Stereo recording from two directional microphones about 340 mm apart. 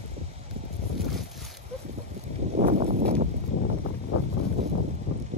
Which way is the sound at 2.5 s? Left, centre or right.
Centre.